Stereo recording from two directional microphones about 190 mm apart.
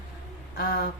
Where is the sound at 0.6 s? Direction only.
50° left (ahead or behind).